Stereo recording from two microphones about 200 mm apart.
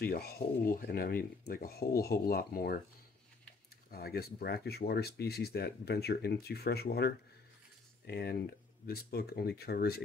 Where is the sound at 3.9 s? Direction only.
50° left (ahead or behind).